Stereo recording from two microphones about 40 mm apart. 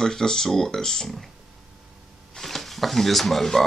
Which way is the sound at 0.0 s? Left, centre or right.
Centre.